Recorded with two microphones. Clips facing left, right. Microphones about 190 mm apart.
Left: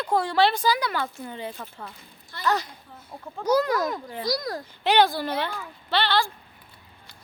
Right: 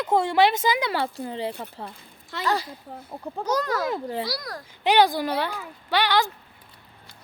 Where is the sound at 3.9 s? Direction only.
30° right (ahead or behind).